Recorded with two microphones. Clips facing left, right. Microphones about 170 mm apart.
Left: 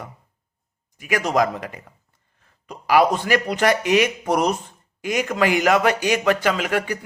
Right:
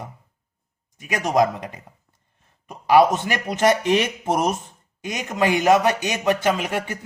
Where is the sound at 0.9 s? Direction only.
25° right (ahead or behind).